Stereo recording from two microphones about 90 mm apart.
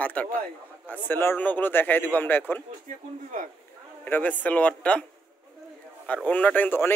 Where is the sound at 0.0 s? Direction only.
15° left (ahead or behind).